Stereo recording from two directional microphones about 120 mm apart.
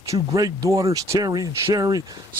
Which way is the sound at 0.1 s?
30° right (ahead or behind).